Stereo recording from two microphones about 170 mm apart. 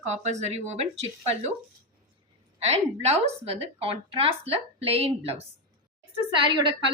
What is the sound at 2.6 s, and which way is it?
A woman's voice, 40° right (ahead or behind).